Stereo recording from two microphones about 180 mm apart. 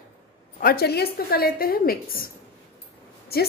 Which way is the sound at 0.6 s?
55° left (ahead or behind).